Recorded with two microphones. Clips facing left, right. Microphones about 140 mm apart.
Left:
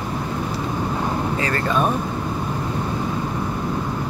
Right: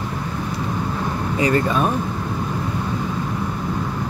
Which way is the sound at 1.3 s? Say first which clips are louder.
Right 5 dB; 15° right (ahead or behind).